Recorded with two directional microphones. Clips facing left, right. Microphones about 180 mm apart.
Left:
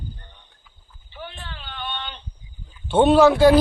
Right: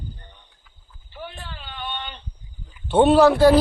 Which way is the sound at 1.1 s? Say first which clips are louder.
Right 1 dB; 5° right (ahead or behind).